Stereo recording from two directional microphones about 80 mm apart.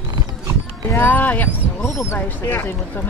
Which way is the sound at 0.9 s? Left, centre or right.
Left.